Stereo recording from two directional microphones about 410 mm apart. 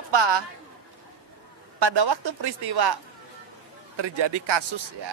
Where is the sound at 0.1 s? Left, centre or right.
Right.